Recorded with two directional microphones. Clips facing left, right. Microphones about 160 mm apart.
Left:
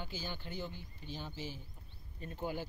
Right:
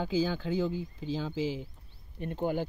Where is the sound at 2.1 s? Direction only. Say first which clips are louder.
Right 9 dB; 65° right (ahead or behind).